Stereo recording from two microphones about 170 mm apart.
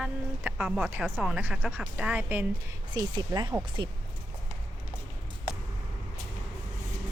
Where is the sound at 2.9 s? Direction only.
25° right (ahead or behind).